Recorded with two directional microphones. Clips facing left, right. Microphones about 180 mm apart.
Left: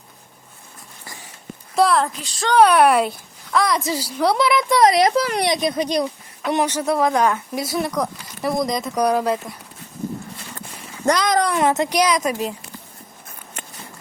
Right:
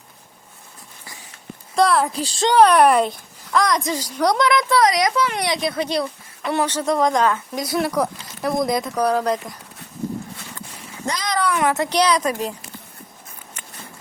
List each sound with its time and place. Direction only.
1.7 s a sound: centre (ahead or behind)
2.1 s speech: 30° right (ahead or behind)
2.6 s speech: centre (ahead or behind)
4.7 s a child's voice: 25° left (ahead or behind)
5.5 s a child's voice: 20° left (ahead or behind); by 8.8 s centre (ahead or behind)
8.8 s a child's voice: 10° left (ahead or behind)
11.0 s a sound: 70° left (ahead or behind)
11.3 s speech: 40° left (ahead or behind)
11.5 s a child's voice: 20° left (ahead or behind)
11.9 s a child's voice: 10° left (ahead or behind)